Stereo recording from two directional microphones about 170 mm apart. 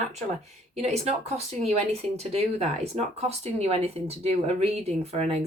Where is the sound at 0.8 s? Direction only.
40° right (ahead or behind).